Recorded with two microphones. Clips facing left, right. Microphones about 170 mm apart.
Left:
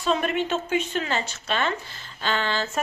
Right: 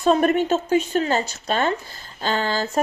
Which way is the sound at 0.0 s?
45° right (ahead or behind).